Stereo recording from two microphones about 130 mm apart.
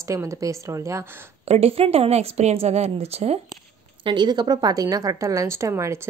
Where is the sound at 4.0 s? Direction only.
35° right (ahead or behind).